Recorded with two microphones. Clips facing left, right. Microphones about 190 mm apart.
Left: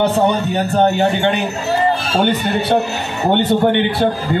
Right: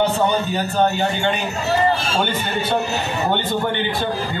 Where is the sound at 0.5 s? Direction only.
65° left (ahead or behind).